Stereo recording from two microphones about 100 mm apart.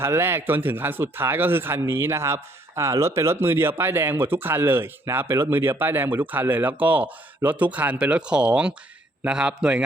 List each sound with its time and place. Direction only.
0.0 s a man's voice: 25° right (ahead or behind)